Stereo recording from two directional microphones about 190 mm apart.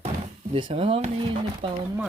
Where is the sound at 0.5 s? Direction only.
25° right (ahead or behind).